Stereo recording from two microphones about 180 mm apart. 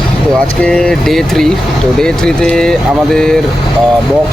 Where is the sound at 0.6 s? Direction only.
5° left (ahead or behind).